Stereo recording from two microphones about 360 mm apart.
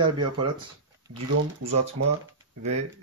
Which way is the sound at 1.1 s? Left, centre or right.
Right.